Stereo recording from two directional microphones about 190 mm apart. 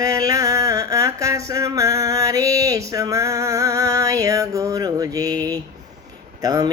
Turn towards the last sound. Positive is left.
turn(degrees=-20)  # may be behind; listen again after turning